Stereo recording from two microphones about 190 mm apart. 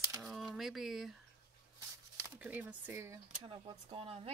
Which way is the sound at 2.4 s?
10° right (ahead or behind).